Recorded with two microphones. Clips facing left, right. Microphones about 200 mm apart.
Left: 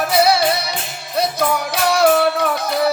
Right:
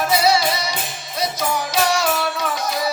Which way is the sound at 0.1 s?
60° left (ahead or behind).